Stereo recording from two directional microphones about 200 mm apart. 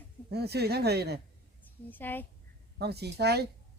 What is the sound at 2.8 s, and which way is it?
Speech, 55° right (ahead or behind).